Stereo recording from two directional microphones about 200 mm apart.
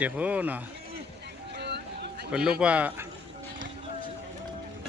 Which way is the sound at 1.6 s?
55° right (ahead or behind).